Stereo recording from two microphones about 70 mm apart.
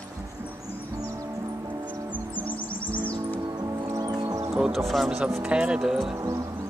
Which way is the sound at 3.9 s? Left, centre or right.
Right.